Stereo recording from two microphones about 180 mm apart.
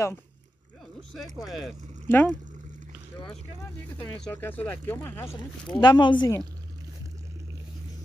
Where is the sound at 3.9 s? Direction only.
10° left (ahead or behind).